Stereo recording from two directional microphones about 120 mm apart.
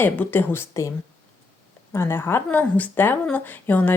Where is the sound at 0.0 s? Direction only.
15° left (ahead or behind).